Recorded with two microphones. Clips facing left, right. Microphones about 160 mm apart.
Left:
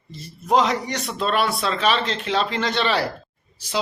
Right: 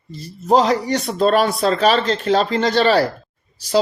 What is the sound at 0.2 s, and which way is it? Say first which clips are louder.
Speech: right 4 dB; 35° right (ahead or behind).